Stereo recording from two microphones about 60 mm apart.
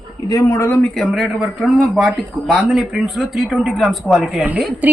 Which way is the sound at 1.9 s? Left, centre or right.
Centre.